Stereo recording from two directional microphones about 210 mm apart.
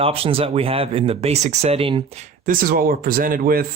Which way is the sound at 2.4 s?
40° right (ahead or behind).